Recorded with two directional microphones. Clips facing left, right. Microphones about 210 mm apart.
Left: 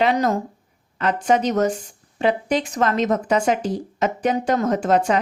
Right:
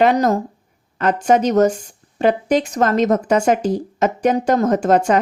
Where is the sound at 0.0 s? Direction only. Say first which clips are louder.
Right 4 dB; 45° right (ahead or behind).